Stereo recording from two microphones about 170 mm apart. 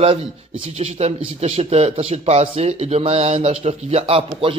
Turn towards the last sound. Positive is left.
turn(degrees=-30)  # may be behind; listen again after turning